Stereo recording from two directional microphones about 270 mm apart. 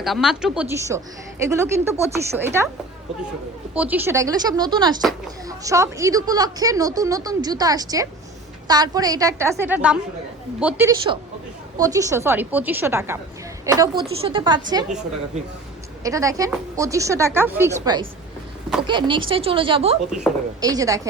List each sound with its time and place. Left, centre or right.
0.0 s a woman's voice: centre
3.8 s a woman's voice: centre
16.0 s a woman's voice: centre
20.1 s a woman's voice: centre
20.6 s a woman's voice: centre